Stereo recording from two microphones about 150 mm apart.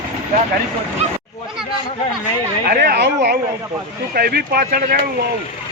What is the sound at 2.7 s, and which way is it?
Speech, 90° right.